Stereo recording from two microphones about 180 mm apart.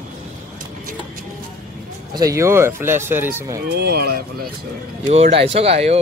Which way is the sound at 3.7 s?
60° right (ahead or behind).